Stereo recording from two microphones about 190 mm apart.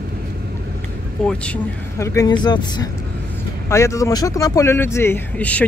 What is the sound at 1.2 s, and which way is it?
A man's voice, 5° left (ahead or behind).